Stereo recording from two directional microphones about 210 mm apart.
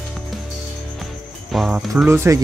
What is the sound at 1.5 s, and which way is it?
Speech, centre (ahead or behind).